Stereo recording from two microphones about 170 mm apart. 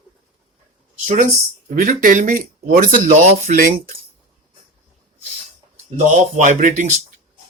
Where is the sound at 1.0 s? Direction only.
40° right (ahead or behind).